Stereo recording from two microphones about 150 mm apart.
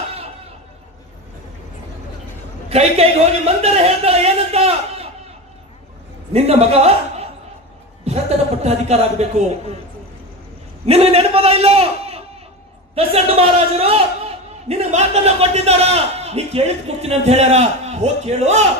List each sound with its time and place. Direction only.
2.7 s a man's voice: 45° right (ahead or behind)
6.3 s a man's voice: 45° right (ahead or behind)
10.9 s a man's voice: 45° right (ahead or behind)